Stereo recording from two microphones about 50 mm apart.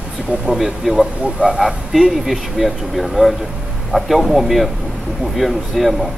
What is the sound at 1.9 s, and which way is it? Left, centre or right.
Speech, centre.